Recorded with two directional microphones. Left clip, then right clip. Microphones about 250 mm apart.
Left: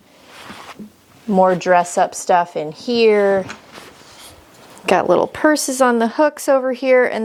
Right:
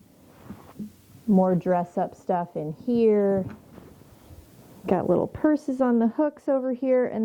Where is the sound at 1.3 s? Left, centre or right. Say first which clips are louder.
Left 10 dB; centre.